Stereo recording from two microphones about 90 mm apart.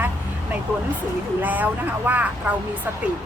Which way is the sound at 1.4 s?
20° right (ahead or behind).